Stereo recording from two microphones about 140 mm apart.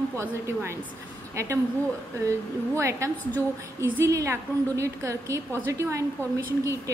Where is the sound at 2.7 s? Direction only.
20° right (ahead or behind).